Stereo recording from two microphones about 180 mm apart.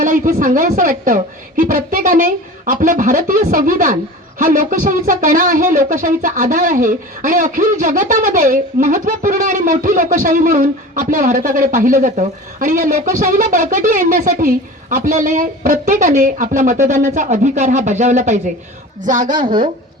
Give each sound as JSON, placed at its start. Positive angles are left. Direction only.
{"t": 0.0, "sound": "speech", "side_deg": -50}